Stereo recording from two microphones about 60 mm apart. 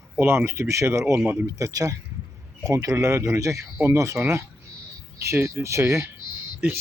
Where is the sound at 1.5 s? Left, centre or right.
Right.